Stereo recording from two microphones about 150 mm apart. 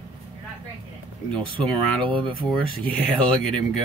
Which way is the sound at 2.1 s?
35° right (ahead or behind).